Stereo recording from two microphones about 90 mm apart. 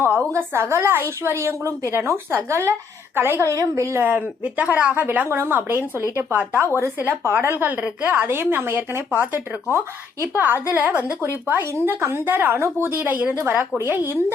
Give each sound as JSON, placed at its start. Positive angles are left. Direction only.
{"t": 0.3, "sound": "a woman's voice", "side_deg": -30}